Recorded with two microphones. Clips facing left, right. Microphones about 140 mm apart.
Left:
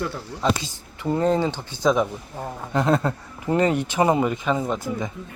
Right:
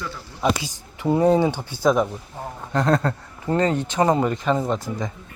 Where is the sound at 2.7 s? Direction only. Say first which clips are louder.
Right 1 dB; 10° left (ahead or behind).